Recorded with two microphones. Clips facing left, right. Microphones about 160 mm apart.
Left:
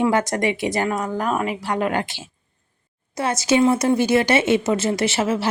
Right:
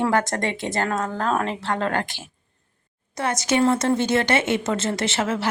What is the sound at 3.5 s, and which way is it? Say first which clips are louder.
A woman's voice: left 3 dB; 10° left (ahead or behind).